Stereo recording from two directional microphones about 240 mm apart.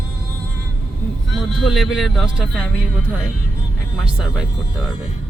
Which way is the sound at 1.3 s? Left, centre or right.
Centre.